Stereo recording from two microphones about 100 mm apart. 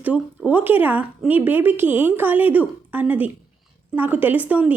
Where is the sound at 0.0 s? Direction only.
15° right (ahead or behind).